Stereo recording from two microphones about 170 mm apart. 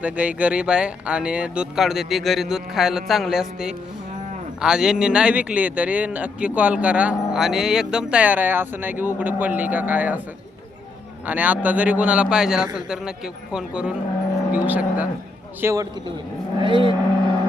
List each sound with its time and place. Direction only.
0.0 s speech: 10° right (ahead or behind)
11.3 s speech: 10° right (ahead or behind)
15.6 s speech: 20° right (ahead or behind)